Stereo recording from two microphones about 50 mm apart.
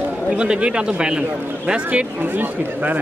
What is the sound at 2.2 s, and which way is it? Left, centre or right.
Speech, right.